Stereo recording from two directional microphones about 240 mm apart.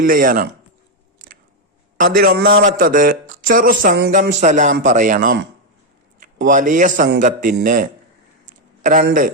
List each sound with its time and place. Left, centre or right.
0.0 s a man's voice: right
2.0 s a man's voice: right
8.4 s a sound: right
9.0 s a man's voice: right